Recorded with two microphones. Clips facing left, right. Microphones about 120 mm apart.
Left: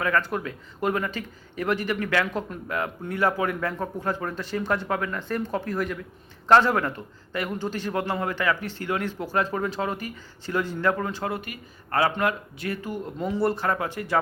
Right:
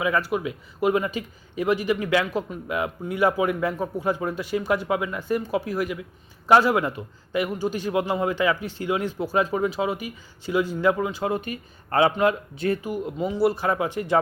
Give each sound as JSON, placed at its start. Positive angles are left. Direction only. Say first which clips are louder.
{"t": 0.0, "sound": "a man's voice", "louder": "right 2 dB", "side_deg": -10}
{"t": 12.8, "sound": "a man's voice", "louder": "right 3 dB", "side_deg": -15}
{"t": 13.1, "sound": "a man's voice", "louder": "right 2 dB", "side_deg": -5}